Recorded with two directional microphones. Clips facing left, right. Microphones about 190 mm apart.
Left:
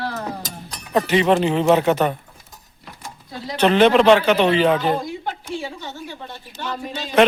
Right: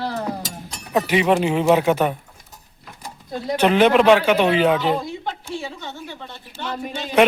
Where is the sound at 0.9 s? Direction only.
5° right (ahead or behind).